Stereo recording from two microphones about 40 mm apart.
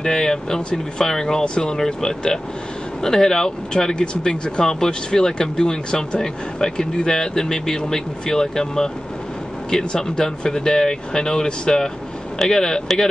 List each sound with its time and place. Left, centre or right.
0.0 s speech: centre
1.8 s speech: centre